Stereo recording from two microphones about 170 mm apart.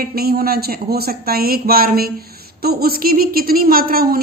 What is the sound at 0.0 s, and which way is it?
A woman's voice, 60° right (ahead or behind).